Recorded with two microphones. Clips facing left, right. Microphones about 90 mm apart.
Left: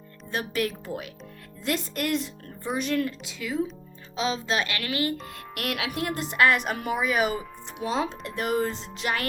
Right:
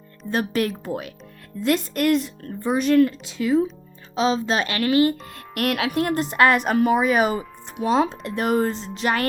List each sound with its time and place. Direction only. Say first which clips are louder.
0.3 s speech: right 5 dB; 45° right (ahead or behind)
1.6 s speech: right 8 dB; 55° right (ahead or behind)
3.2 s a woman's voice: right 9 dB; 35° right (ahead or behind)
5.5 s speech: right 8 dB; 50° right (ahead or behind)